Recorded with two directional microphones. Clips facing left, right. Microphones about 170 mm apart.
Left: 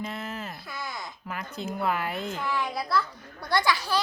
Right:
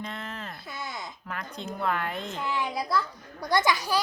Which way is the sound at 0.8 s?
Centre (ahead or behind).